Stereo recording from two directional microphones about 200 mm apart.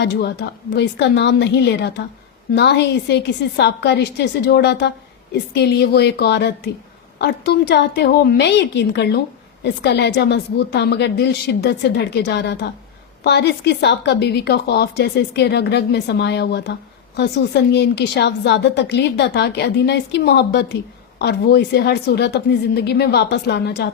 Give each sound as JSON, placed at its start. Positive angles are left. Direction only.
{"t": 0.0, "sound": "a woman's voice", "side_deg": 55}